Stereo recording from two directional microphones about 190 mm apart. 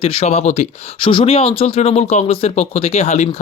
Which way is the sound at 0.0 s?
30° left (ahead or behind).